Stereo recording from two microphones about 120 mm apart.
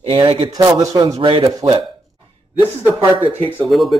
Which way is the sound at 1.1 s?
45° right (ahead or behind).